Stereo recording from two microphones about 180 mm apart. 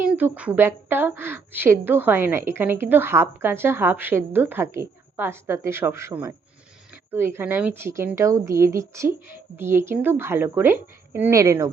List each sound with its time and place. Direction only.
0.0 s a woman's voice: 10° right (ahead or behind)